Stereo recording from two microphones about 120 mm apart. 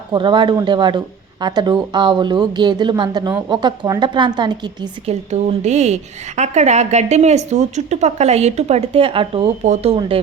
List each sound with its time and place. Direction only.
0.1 s speech: 40° right (ahead or behind)
5.0 s a woman's voice: 65° right (ahead or behind); by 10.2 s 50° right (ahead or behind)